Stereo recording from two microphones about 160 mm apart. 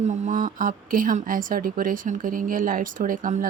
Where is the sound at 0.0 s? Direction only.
50° right (ahead or behind).